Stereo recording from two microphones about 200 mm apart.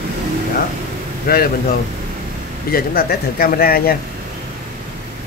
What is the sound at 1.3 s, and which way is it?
Speech, 50° left (ahead or behind).